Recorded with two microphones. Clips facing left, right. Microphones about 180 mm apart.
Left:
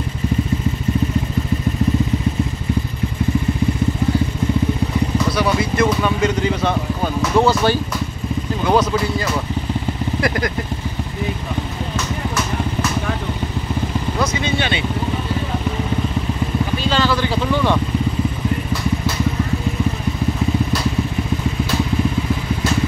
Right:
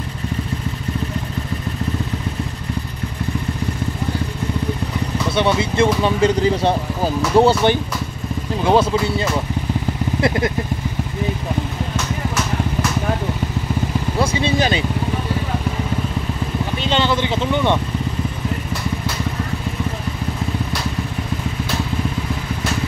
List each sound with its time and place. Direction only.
5.3 s speech: 25° right (ahead or behind)
10.2 s vehicle: 25° right (ahead or behind)
14.1 s vehicle: 30° right (ahead or behind)
16.7 s vehicle: 25° right (ahead or behind)